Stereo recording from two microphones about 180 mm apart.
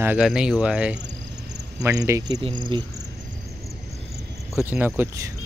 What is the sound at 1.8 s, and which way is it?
Speech, 15° right (ahead or behind).